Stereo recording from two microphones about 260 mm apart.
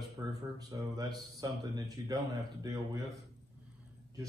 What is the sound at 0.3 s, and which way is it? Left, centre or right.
Speech, centre.